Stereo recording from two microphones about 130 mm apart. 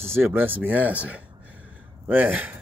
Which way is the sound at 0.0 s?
20° right (ahead or behind).